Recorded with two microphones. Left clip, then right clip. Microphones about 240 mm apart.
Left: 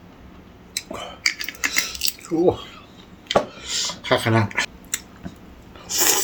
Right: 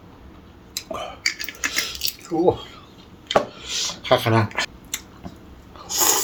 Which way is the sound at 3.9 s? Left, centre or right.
Centre.